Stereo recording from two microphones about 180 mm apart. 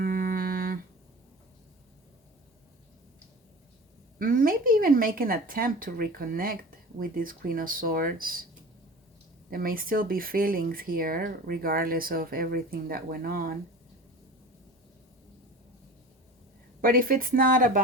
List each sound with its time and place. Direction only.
0.0 s music: 50° right (ahead or behind)
4.2 s speech: 50° right (ahead or behind)
9.5 s speech: 55° right (ahead or behind)
16.8 s speech: 50° right (ahead or behind)